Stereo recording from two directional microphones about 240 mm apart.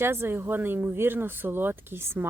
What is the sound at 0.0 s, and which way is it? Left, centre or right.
A woman's voice, centre.